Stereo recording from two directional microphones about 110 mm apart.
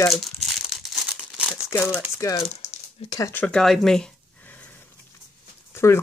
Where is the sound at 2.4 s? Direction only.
75° left (ahead or behind).